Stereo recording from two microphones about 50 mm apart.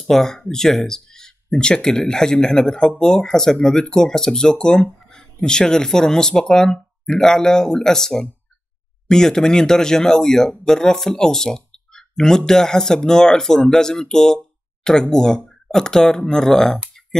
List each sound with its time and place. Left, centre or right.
0.0 s speech: centre